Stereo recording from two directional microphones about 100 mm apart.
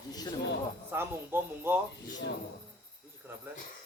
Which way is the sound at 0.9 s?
20° right (ahead or behind).